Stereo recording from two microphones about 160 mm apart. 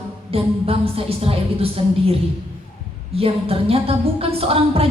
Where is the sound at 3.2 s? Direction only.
35° right (ahead or behind).